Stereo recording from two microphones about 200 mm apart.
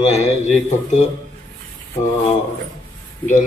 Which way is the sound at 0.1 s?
35° left (ahead or behind).